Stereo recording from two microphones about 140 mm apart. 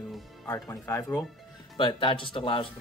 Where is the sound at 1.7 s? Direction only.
35° left (ahead or behind).